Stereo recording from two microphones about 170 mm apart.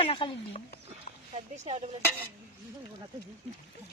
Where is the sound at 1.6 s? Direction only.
40° right (ahead or behind).